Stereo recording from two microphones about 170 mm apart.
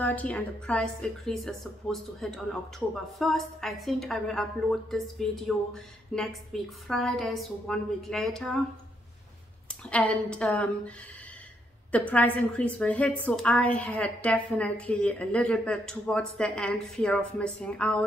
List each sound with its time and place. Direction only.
0.0 s a woman's voice: 10° left (ahead or behind)
9.8 s a woman's voice: 5° left (ahead or behind)
11.9 s a woman's voice: 10° left (ahead or behind)